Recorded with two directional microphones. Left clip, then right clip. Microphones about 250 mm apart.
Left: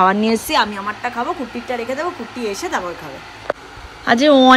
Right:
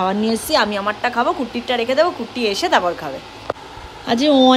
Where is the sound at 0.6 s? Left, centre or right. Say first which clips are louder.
Even; centre.